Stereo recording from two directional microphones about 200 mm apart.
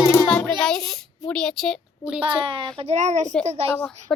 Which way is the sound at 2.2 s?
25° right (ahead or behind).